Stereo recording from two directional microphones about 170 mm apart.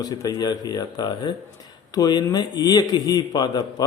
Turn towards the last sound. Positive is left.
turn(degrees=25)  # may be behind; listen again after turning